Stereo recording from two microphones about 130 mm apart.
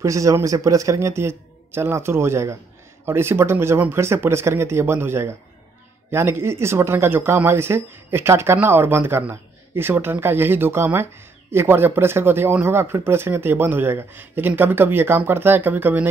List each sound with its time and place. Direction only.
0.0 s speech: 25° right (ahead or behind)